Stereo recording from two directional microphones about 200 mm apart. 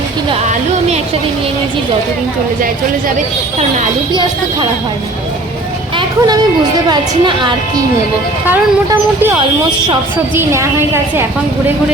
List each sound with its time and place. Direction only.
6.0 s a sound: 20° right (ahead or behind)
6.8 s a woman's voice: 20° right (ahead or behind)
8.4 s speech: 10° right (ahead or behind)